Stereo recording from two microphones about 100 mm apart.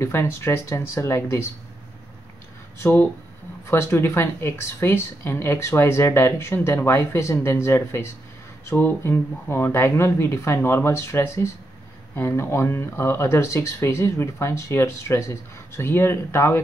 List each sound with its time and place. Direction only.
0.0 s speech: 25° left (ahead or behind)
2.8 s speech: 20° left (ahead or behind)